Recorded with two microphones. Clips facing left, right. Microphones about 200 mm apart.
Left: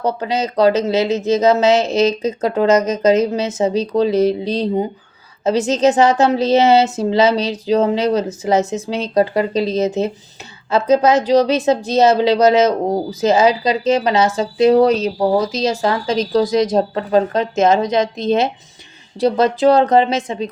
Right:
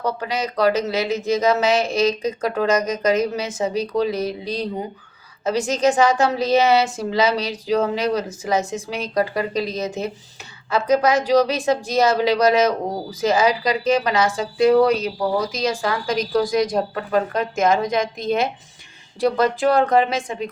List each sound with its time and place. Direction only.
0.0 s a woman's voice: 25° left (ahead or behind)